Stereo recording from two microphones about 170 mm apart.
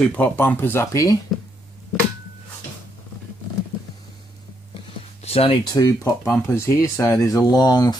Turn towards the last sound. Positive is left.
turn(degrees=25)  # may be behind; listen again after turning